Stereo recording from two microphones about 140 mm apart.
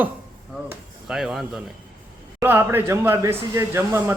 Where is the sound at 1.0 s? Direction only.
5° right (ahead or behind).